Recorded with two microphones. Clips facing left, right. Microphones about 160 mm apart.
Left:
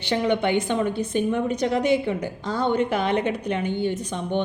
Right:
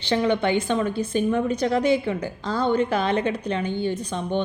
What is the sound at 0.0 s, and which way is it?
A woman's voice, 15° left (ahead or behind).